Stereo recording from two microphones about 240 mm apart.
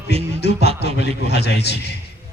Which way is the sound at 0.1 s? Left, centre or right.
Left.